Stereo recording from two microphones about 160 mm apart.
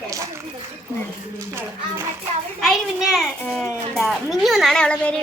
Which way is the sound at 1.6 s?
15° right (ahead or behind).